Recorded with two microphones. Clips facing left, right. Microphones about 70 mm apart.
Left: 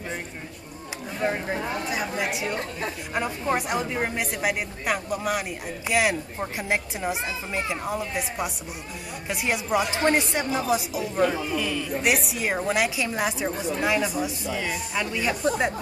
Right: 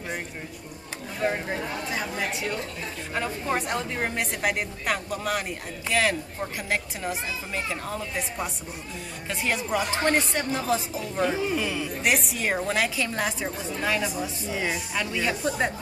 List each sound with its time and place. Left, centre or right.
1.2 s a woman's voice: centre
11.2 s speech: centre
12.0 s speech: centre
14.5 s speech: centre
15.0 s speech: centre